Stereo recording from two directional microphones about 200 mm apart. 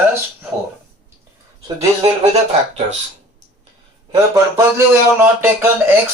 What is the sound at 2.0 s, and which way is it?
Speech, 30° right (ahead or behind).